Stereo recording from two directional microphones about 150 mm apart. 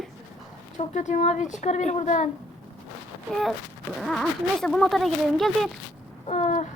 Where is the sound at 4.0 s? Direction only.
Centre (ahead or behind).